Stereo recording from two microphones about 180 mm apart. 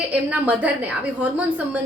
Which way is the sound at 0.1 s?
10° right (ahead or behind).